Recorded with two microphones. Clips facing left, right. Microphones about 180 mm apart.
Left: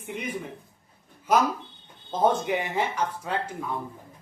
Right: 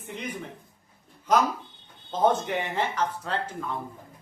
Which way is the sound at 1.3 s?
10° left (ahead or behind).